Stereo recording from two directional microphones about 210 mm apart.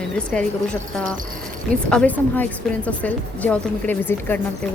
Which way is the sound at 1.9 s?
5° left (ahead or behind).